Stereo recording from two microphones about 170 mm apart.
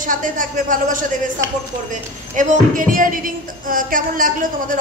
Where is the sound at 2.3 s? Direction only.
50° right (ahead or behind).